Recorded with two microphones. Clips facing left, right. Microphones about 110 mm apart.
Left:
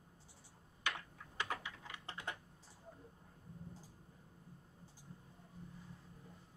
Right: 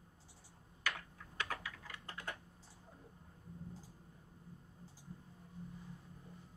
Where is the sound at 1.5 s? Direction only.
25° left (ahead or behind).